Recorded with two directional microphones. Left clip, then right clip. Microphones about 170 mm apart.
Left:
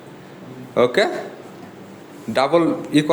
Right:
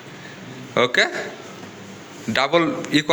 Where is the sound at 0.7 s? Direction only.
5° left (ahead or behind).